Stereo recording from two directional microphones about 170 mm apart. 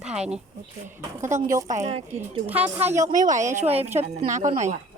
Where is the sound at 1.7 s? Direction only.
40° right (ahead or behind).